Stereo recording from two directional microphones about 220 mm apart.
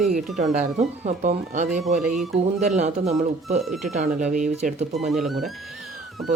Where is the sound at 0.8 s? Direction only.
30° right (ahead or behind).